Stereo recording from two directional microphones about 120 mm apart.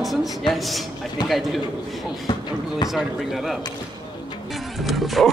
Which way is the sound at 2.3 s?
35° left (ahead or behind).